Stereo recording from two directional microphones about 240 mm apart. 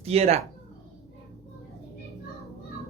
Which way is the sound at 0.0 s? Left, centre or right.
Right.